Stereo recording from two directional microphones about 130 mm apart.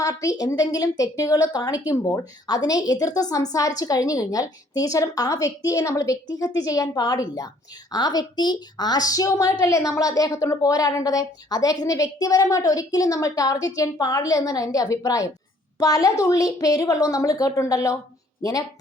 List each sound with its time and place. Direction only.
0.0 s a woman's voice: 25° left (ahead or behind)